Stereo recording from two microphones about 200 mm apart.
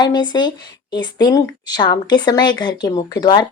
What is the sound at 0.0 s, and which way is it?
A woman's voice, 20° left (ahead or behind).